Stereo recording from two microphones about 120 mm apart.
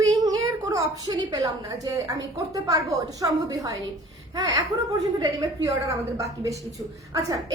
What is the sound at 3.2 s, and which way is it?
Speech, 30° right (ahead or behind).